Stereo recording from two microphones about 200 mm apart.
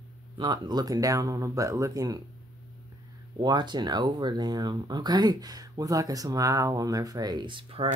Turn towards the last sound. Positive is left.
turn(degrees=-25)  # may be behind; listen again after turning